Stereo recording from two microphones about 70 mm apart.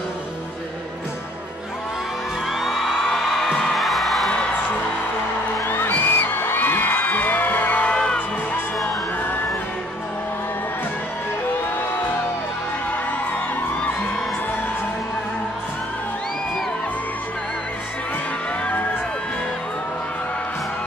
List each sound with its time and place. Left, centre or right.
2.6 s music: centre
5.7 s music: left; by 8.2 s centre